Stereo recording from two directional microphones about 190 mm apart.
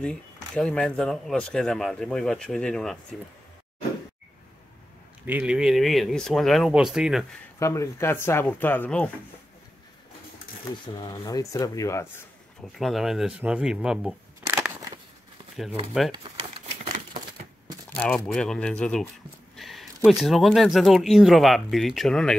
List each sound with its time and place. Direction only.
0.0 s speech: 5° left (ahead or behind)
5.2 s speech: 10° right (ahead or behind)
7.5 s speech: 15° left (ahead or behind)
10.9 s speech: 25° left (ahead or behind)
12.7 s speech: centre (ahead or behind)
14.4 s crushing: 15° right (ahead or behind)
17.9 s speech: 5° left (ahead or behind)